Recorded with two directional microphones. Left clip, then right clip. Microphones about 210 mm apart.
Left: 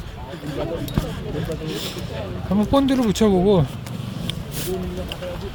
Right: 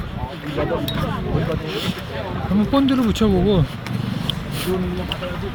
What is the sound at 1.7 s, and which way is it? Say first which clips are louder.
Speech: right 3 dB; 20° left (ahead or behind).